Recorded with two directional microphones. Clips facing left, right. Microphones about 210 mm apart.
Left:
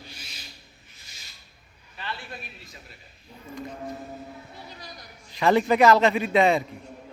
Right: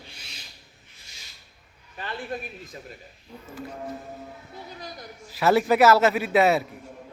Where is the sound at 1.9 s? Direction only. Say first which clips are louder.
Right 5 dB; 45° right (ahead or behind).